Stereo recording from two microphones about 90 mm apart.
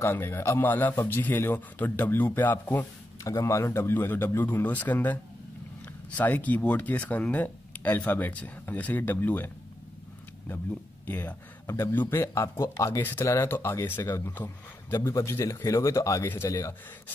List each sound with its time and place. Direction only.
0.0 s speech: 25° left (ahead or behind)
3.3 s speech: 35° left (ahead or behind)
11.1 s a man's voice: 20° left (ahead or behind); by 16.7 s 40° left (ahead or behind)